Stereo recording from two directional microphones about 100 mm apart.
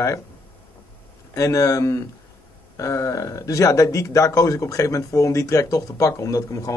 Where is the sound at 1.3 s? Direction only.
35° left (ahead or behind).